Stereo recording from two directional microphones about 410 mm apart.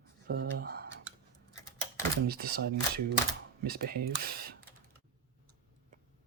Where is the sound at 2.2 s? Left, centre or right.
Right.